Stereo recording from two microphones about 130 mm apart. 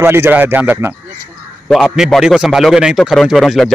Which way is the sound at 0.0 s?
15° right (ahead or behind).